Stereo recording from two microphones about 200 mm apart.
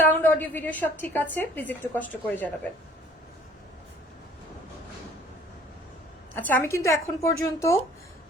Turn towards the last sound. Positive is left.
turn(degrees=15)  # may be behind; listen again after turning